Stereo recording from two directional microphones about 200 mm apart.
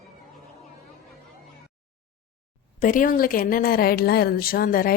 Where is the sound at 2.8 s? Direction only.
40° left (ahead or behind).